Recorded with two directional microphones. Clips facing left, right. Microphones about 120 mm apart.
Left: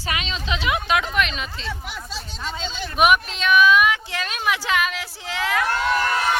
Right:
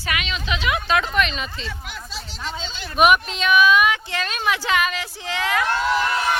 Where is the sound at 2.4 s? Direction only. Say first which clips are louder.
Left 2 dB; centre (ahead or behind).